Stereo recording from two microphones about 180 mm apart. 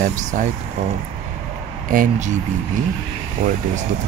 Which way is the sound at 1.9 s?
45° right (ahead or behind).